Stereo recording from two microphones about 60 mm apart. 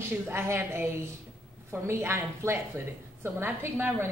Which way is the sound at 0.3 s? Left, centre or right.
Right.